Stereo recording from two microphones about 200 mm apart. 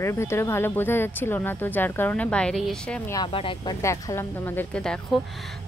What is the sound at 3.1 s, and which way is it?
Speech, 25° left (ahead or behind).